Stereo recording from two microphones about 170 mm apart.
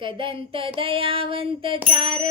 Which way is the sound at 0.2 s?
30° right (ahead or behind).